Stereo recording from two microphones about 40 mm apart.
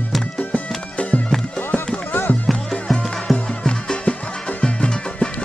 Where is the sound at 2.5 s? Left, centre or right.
Centre.